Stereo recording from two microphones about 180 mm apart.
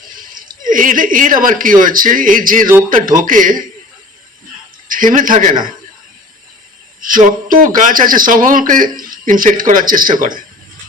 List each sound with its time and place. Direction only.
0.1 s speech: 50° right (ahead or behind)
4.9 s speech: 50° right (ahead or behind)
7.0 s speech: 50° right (ahead or behind)